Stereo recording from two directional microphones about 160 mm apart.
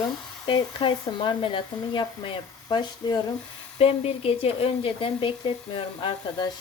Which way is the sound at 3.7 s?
35° left (ahead or behind).